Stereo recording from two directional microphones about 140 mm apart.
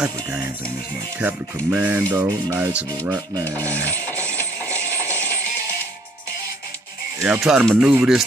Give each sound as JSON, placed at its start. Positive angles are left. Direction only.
{"t": 1.2, "sound": "speech", "side_deg": -15}
{"t": 3.7, "sound": "a sound", "side_deg": 10}
{"t": 4.3, "sound": "music", "side_deg": 10}
{"t": 7.2, "sound": "speech", "side_deg": -5}
{"t": 8.0, "sound": "speech", "side_deg": 0}